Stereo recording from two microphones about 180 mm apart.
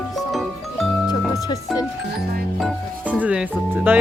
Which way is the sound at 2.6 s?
5° right (ahead or behind).